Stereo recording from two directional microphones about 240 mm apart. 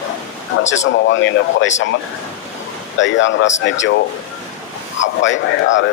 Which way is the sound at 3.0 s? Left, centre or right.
Left.